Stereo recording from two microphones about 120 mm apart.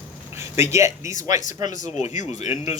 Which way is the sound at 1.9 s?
65° left (ahead or behind).